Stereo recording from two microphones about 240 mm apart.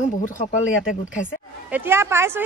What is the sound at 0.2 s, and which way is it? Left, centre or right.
Speech, left.